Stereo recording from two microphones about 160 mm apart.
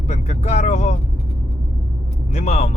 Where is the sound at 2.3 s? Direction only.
45° left (ahead or behind).